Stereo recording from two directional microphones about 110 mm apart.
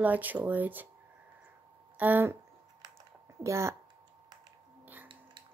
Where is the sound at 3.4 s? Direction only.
25° right (ahead or behind).